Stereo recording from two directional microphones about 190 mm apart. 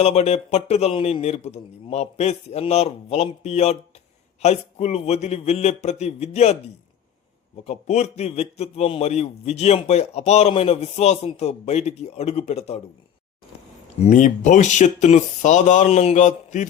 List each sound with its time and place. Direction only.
0.0 s a man's voice: 35° left (ahead or behind)
14.0 s a man's voice: 40° left (ahead or behind)